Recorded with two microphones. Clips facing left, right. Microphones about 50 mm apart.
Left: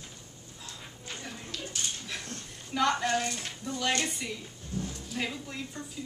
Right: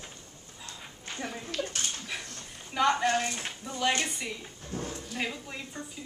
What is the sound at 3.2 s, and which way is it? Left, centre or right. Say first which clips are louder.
A woman's voice: even; centre.